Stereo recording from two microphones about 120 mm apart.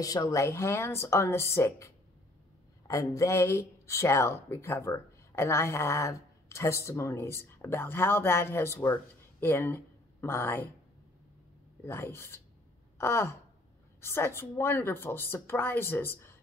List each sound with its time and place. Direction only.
0.0 s a woman's voice: 30° left (ahead or behind)
2.9 s speech: 25° left (ahead or behind)
11.8 s a woman's voice: 20° left (ahead or behind)
12.9 s sigh: 20° left (ahead or behind)
14.0 s a woman's voice: 20° left (ahead or behind)